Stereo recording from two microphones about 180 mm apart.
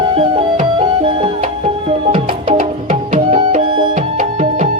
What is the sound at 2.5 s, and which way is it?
Music, 40° right (ahead or behind).